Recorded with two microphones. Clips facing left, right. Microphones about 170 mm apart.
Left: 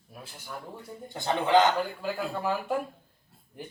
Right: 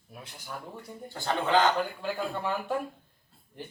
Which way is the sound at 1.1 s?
20° left (ahead or behind).